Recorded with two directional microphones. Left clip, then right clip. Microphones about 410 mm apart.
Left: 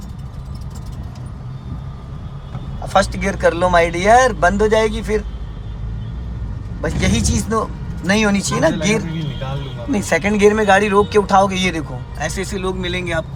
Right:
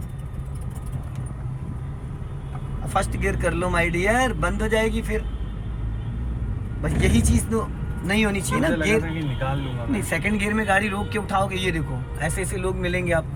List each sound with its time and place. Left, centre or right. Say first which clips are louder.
2.8 s speech: left 8 dB; centre
6.8 s speech: left 4 dB; centre